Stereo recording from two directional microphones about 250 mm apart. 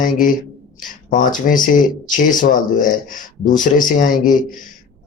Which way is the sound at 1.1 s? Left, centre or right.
Left.